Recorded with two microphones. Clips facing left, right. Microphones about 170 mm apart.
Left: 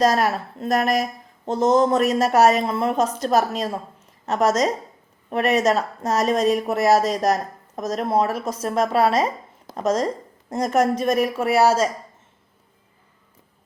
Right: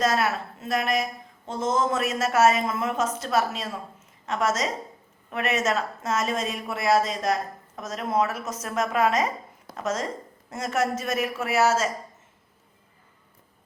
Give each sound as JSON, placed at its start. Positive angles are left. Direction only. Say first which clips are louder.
{"t": 0.0, "sound": "speech", "louder": "left 5 dB", "side_deg": 35}